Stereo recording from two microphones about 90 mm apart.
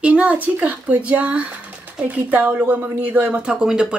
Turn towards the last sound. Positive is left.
turn(degrees=-10)  # may be behind; listen again after turning